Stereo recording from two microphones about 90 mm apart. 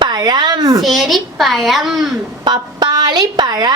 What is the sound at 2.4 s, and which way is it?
A woman's voice, 55° right (ahead or behind).